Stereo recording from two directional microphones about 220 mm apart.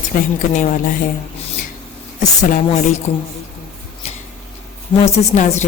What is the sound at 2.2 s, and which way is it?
Speech, 35° left (ahead or behind).